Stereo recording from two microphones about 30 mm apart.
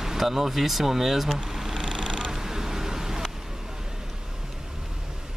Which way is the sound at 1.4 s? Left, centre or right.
Centre.